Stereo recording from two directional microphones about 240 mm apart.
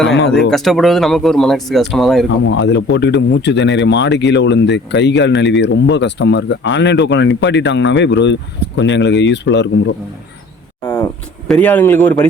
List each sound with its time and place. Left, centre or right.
0.5 s speech: centre
2.5 s speech: left
10.8 s speech: centre
11.4 s speech: centre